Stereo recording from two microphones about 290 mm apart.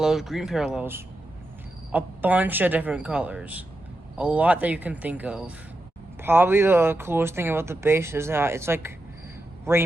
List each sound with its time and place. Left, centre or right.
0.0 s speech: centre